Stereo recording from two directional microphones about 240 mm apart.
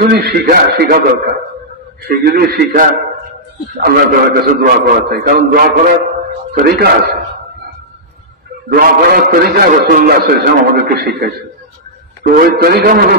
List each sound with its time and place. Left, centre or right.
0.0 s a man's voice: right
8.7 s a man's voice: right